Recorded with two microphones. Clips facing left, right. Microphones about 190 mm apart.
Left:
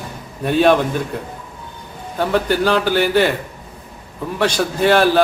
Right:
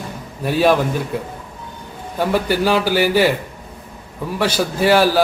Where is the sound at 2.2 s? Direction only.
10° right (ahead or behind).